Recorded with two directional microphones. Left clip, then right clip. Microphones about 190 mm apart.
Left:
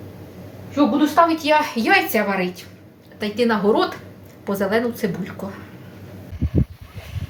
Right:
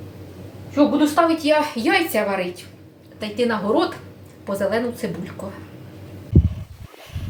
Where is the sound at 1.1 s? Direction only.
25° left (ahead or behind).